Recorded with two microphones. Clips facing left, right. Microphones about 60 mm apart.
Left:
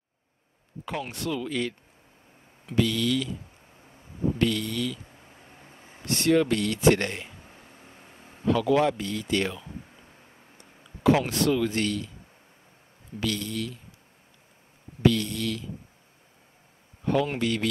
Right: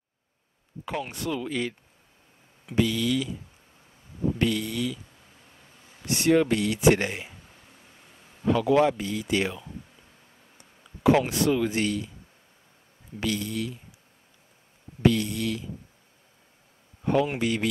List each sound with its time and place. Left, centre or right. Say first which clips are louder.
0.8 s speech: right 1 dB; centre
4.4 s speech: even; centre
5.4 s vehicle: left 4 dB; left
6.0 s speech: right 1 dB; centre
8.5 s speech: right 1 dB; centre
10.6 s a sound: right 1 dB; centre
11.2 s speech: even; centre
13.2 s speech: right 1 dB; centre
15.0 s speech: even; centre
17.0 s speech: right 1 dB; centre